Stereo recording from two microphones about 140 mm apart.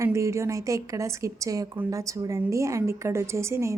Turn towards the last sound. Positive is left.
turn(degrees=-20)  # may be behind; listen again after turning